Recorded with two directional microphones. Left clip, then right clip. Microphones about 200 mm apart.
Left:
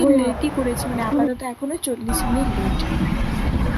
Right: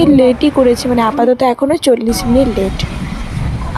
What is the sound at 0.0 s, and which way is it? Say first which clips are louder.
Speech: right 9 dB; 40° right (ahead or behind).